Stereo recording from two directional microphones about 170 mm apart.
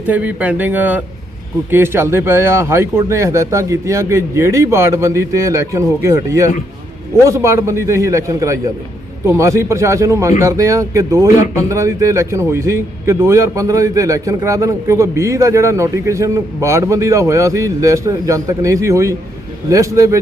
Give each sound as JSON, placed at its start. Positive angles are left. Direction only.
{"t": 0.1, "sound": "speech", "side_deg": -10}